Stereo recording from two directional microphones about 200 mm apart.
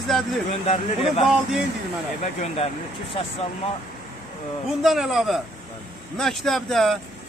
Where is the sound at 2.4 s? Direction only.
30° left (ahead or behind).